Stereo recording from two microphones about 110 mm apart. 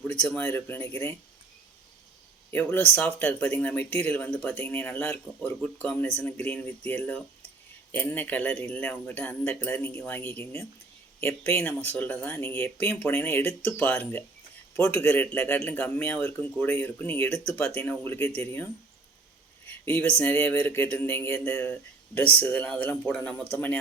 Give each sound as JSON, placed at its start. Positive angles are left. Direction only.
{"t": 0.1, "sound": "speech", "side_deg": 15}
{"t": 2.5, "sound": "speech", "side_deg": 20}
{"t": 17.2, "sound": "speech", "side_deg": 5}
{"t": 17.7, "sound": "speech", "side_deg": 20}
{"t": 19.6, "sound": "a sound", "side_deg": 20}
{"t": 20.1, "sound": "speech", "side_deg": 10}